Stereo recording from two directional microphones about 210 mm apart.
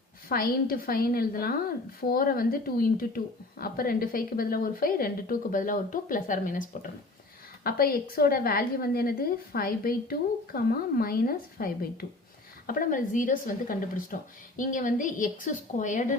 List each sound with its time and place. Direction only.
0.3 s a woman's voice: 45° left (ahead or behind)